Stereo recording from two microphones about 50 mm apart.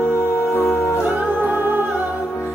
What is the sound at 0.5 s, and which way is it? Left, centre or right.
Music, left.